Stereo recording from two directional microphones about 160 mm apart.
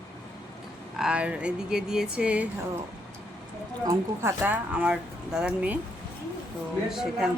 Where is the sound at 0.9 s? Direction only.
5° right (ahead or behind).